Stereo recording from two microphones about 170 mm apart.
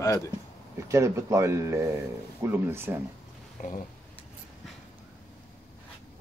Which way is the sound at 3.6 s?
45° left (ahead or behind).